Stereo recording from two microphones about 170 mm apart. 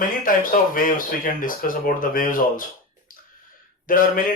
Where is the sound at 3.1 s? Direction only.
55° left (ahead or behind).